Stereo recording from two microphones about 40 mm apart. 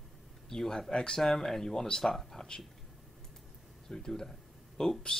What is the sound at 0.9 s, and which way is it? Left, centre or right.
Speech, left.